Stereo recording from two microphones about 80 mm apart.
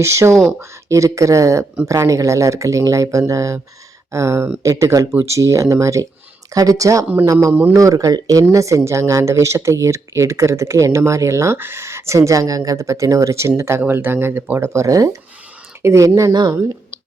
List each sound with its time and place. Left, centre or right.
0.0 s speech: right
16.3 s speech: right